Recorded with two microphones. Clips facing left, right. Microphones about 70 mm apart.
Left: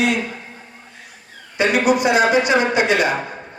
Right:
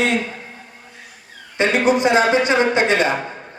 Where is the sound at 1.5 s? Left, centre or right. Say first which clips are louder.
Even; right.